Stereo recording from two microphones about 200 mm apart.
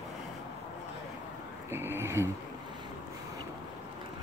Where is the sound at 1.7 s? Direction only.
10° right (ahead or behind).